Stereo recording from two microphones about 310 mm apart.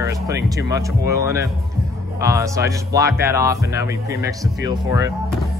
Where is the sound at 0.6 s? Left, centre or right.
Centre.